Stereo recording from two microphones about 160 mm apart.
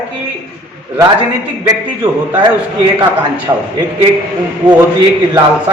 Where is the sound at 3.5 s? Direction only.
25° right (ahead or behind).